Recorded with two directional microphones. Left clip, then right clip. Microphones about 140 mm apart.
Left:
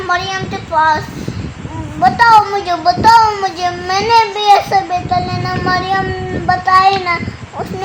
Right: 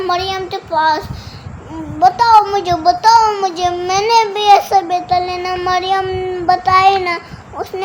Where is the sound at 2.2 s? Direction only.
15° right (ahead or behind).